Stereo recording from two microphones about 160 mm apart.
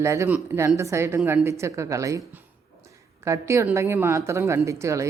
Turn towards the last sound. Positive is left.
turn(degrees=-20)  # may be behind; listen again after turning